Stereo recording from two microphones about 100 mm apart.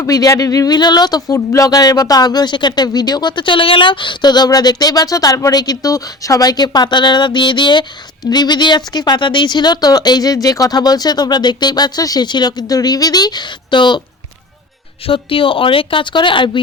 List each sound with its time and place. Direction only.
0.0 s speech: 35° left (ahead or behind)
15.0 s a woman's voice: 65° left (ahead or behind)